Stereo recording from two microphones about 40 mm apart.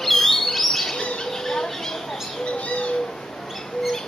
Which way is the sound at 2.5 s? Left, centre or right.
Left.